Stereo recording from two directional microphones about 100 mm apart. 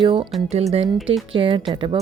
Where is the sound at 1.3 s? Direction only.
65° right (ahead or behind).